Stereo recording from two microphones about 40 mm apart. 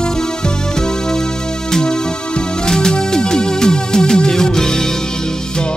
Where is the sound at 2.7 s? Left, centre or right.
Centre.